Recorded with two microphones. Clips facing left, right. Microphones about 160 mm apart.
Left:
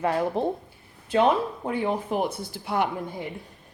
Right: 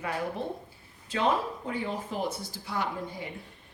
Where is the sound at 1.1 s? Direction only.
60° left (ahead or behind).